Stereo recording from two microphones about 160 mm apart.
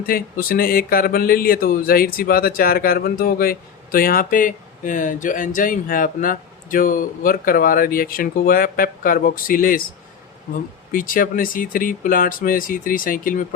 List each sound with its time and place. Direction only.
0.0 s speech: 65° left (ahead or behind)
10.9 s speech: 60° left (ahead or behind)